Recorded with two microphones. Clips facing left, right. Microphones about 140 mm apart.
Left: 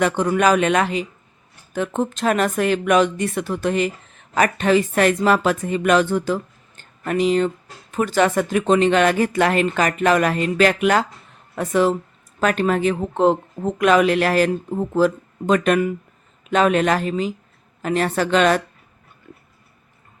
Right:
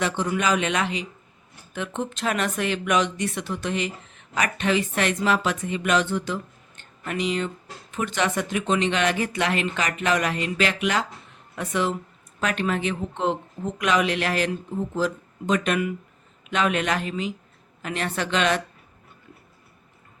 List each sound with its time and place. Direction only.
0.0 s speech: 50° left (ahead or behind)